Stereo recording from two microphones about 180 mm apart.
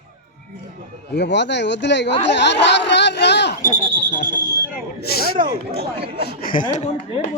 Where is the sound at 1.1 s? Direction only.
75° left (ahead or behind).